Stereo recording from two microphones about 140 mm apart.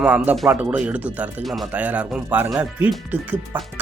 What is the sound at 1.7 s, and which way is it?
Speech, 10° right (ahead or behind).